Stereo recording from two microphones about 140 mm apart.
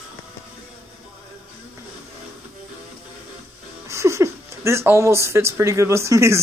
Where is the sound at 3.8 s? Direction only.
20° right (ahead or behind).